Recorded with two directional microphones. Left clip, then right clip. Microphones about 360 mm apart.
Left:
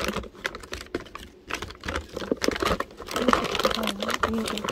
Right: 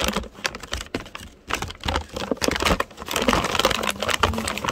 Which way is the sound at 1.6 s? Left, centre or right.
Right.